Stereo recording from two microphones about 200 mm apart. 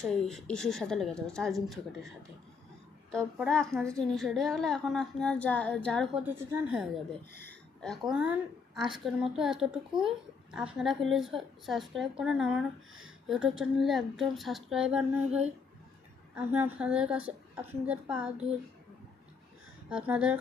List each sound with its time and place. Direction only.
0.0 s a woman's voice: centre (ahead or behind)
3.2 s a woman's voice: 5° right (ahead or behind)
6.2 s a woman's voice: 10° right (ahead or behind)
19.9 s a woman's voice: 5° right (ahead or behind)